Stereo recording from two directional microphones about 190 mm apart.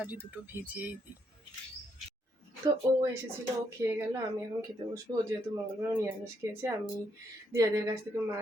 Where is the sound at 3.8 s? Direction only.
15° right (ahead or behind).